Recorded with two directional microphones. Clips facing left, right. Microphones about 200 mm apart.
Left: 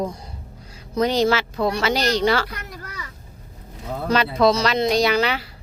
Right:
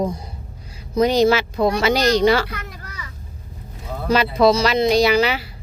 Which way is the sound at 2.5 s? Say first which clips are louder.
Right 1 dB; 45° left (ahead or behind).